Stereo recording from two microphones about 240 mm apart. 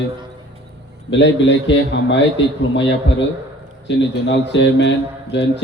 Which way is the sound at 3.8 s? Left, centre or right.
Left.